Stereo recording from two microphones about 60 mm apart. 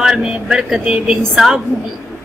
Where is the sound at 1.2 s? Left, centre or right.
Centre.